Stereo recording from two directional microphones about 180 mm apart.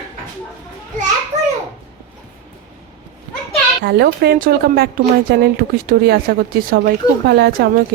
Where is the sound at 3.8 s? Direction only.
60° right (ahead or behind).